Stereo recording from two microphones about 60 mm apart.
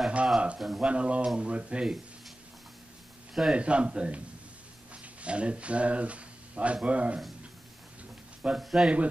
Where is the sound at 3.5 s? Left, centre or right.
Centre.